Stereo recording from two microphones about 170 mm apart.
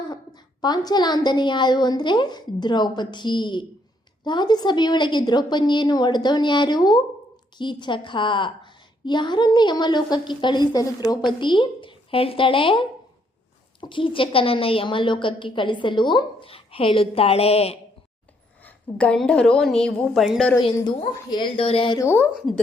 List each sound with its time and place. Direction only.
0.1 s a woman's voice: 25° left (ahead or behind)
13.8 s a woman's voice: 30° left (ahead or behind)
18.6 s a woman's voice: 5° left (ahead or behind)
20.6 s a woman's voice: 25° left (ahead or behind)
21.9 s speech: 15° left (ahead or behind)
22.4 s a woman's voice: centre (ahead or behind)